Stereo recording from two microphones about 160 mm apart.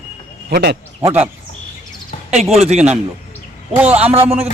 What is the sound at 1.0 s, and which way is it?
Speech, 10° right (ahead or behind).